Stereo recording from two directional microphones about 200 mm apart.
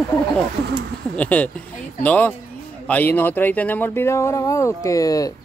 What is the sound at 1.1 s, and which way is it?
Speech, 5° left (ahead or behind).